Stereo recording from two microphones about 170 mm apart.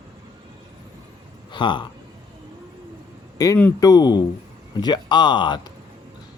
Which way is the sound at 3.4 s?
20° left (ahead or behind).